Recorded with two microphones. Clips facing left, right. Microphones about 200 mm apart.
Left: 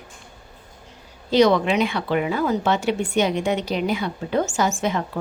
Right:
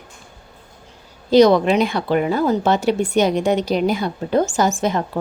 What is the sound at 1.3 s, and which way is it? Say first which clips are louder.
Speech: right 5 dB; 40° right (ahead or behind).